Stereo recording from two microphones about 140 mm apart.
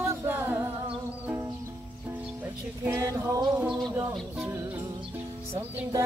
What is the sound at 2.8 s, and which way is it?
Music, 20° right (ahead or behind).